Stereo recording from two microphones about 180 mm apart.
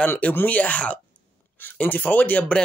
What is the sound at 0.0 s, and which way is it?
Speech, 10° left (ahead or behind).